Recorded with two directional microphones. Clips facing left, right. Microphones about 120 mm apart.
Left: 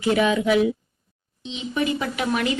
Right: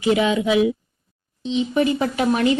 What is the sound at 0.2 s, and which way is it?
Speech, 20° right (ahead or behind).